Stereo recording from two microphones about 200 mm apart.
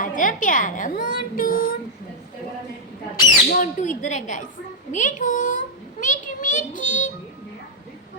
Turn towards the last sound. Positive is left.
turn(degrees=40)  # may be behind; listen again after turning